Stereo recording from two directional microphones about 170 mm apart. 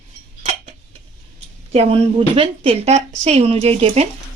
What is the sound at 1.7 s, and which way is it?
A woman's voice, 35° right (ahead or behind).